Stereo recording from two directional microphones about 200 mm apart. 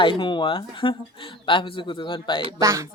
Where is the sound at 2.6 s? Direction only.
15° right (ahead or behind).